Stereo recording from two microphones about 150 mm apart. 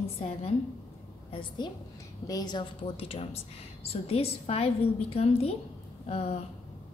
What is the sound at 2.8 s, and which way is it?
A woman's voice, 40° left (ahead or behind).